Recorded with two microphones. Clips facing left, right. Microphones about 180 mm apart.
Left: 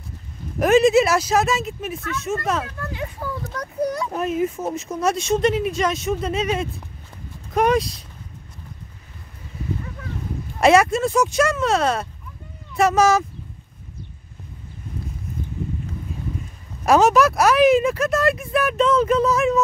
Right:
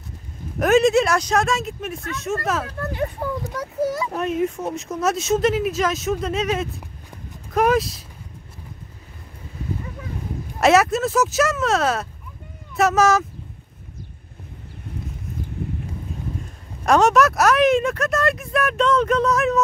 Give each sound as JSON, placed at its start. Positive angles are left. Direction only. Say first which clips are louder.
{"t": 0.6, "sound": "speech", "louder": "left 1 dB", "side_deg": 0}
{"t": 3.2, "sound": "speech", "louder": "right 3 dB", "side_deg": -25}
{"t": 3.5, "sound": "speech", "louder": "left 1 dB", "side_deg": -5}
{"t": 10.6, "sound": "speech", "louder": "left 1 dB", "side_deg": 0}
{"t": 16.8, "sound": "speech", "louder": "left 1 dB", "side_deg": 0}